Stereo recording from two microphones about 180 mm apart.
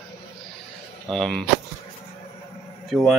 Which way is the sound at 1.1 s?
Centre (ahead or behind).